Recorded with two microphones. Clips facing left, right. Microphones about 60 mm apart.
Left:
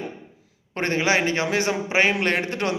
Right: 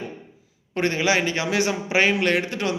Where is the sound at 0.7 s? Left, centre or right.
Left.